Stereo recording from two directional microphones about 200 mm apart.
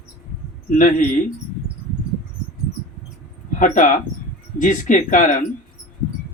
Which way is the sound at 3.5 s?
40° left (ahead or behind).